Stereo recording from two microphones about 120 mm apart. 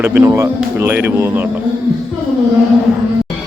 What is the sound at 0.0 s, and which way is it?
Speech, 20° right (ahead or behind).